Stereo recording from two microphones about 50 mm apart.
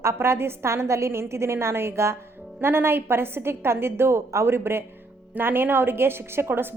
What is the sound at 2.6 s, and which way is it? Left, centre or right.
Speech, right.